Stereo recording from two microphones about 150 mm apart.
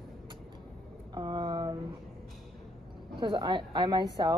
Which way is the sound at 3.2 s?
30° right (ahead or behind).